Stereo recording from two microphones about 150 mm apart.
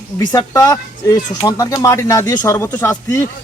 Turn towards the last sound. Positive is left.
turn(degrees=20)  # may be behind; listen again after turning